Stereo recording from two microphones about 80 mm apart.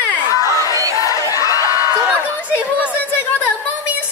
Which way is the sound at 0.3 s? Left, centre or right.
Left.